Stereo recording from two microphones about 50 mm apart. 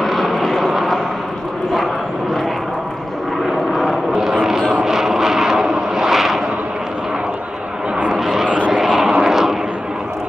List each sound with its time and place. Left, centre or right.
0.0 s vehicle: centre
3.7 s vehicle: centre
4.1 s vehicle: centre
8.1 s vehicle: centre
8.5 s vehicle: right
8.7 s vehicle: centre
9.2 s a sound: centre